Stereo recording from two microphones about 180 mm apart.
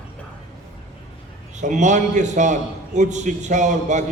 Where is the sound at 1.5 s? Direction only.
40° right (ahead or behind).